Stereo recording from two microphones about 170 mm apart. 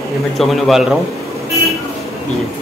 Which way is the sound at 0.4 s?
Centre (ahead or behind).